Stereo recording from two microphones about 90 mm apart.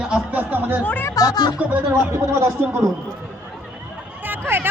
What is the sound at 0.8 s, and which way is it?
Speech, 20° left (ahead or behind).